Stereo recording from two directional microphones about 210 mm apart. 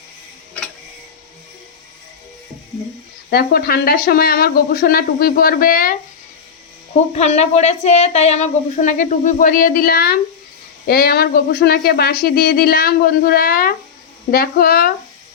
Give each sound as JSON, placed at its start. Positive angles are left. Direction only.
{"t": 3.2, "sound": "speech", "side_deg": 50}
{"t": 7.2, "sound": "speech", "side_deg": 30}